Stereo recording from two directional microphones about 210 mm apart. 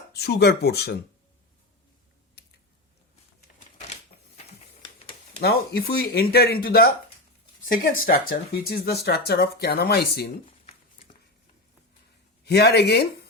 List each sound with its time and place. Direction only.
0.1 s speech: 50° left (ahead or behind)
2.4 s squish: 50° left (ahead or behind)
5.4 s speech: 50° left (ahead or behind)
12.5 s speech: 50° left (ahead or behind)